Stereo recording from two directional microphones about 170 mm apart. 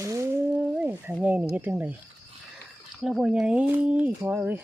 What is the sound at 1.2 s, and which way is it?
Speech, 10° right (ahead or behind).